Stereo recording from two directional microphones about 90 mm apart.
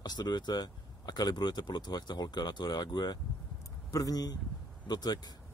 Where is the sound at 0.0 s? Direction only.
50° left (ahead or behind).